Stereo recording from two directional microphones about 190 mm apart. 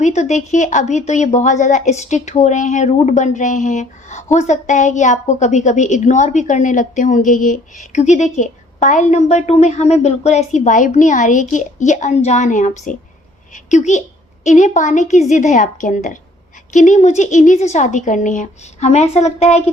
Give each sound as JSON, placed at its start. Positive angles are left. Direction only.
{"t": 0.0, "sound": "a woman's voice", "side_deg": 35}